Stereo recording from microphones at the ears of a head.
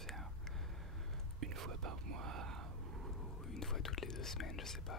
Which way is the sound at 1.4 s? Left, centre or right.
Right.